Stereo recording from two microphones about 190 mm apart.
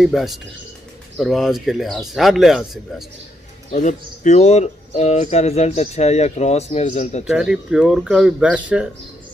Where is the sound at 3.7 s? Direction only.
40° left (ahead or behind).